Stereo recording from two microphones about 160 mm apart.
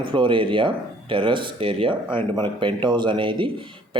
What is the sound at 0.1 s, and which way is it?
A man's voice, 30° right (ahead or behind).